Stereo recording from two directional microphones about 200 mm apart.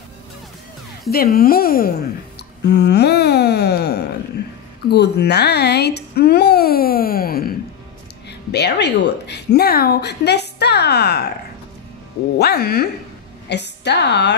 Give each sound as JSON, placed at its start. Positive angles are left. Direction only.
{"t": 1.1, "sound": "a child's voice", "side_deg": 50}
{"t": 12.4, "sound": "speech", "side_deg": 50}